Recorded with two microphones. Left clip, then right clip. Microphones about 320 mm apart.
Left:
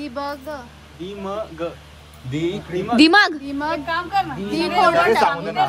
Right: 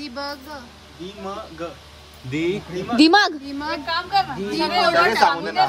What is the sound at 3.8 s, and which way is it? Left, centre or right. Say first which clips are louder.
Speech: right 4 dB; right.